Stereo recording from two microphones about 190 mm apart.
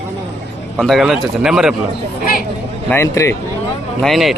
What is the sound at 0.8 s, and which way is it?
Speech, centre (ahead or behind).